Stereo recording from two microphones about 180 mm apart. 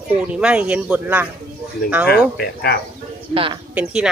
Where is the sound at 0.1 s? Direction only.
5° right (ahead or behind).